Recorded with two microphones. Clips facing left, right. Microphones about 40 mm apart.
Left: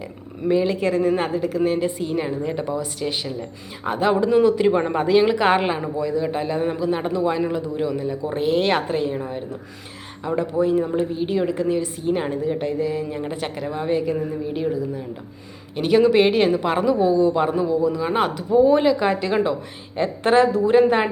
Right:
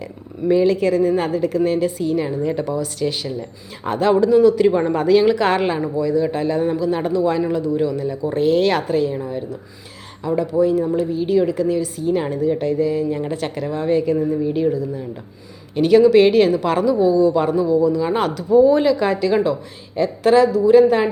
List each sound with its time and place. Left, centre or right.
0.4 s speech: centre
1.4 s a woman's voice: centre
2.0 s a woman's voice: left
4.3 s a woman's voice: left